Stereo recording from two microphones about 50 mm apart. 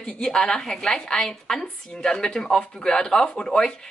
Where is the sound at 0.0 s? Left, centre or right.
Centre.